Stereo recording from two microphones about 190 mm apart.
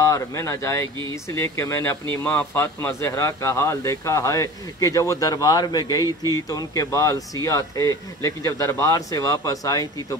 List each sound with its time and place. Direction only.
0.0 s speech: 15° left (ahead or behind)